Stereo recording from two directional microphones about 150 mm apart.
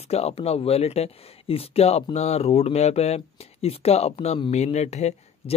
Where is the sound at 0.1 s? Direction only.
45° left (ahead or behind).